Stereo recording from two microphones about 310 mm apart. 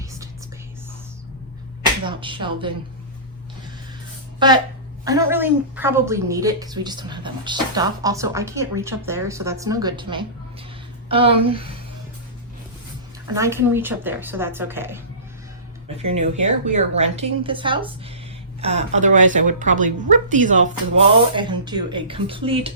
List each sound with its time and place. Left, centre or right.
2.0 s a woman's voice: centre
4.4 s a woman's voice: centre
13.3 s a woman's voice: centre
16.0 s a woman's voice: right